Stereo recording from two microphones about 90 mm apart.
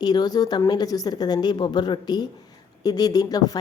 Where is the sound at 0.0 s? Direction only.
50° left (ahead or behind).